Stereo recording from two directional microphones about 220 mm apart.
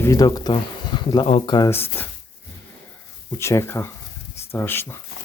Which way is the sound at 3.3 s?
10° left (ahead or behind).